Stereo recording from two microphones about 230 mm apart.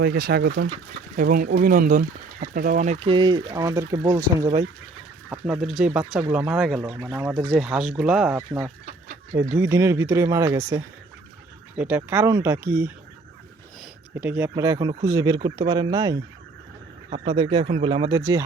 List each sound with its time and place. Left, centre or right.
0.0 s speech: right; by 4.6 s centre
5.3 s speech: centre
8.4 s speech: centre
14.2 s speech: centre